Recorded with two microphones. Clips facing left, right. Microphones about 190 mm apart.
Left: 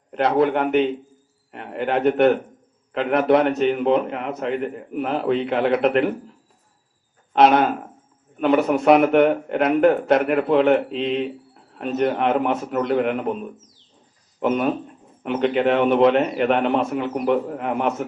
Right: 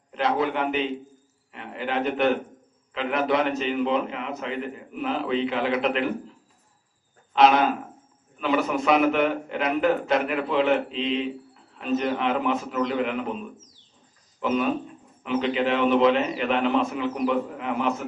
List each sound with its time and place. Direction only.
0.1 s a man's voice: 55° left (ahead or behind)
7.3 s a man's voice: 55° left (ahead or behind)